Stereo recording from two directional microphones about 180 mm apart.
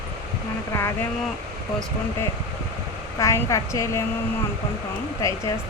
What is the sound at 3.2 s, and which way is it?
Speech, 15° left (ahead or behind).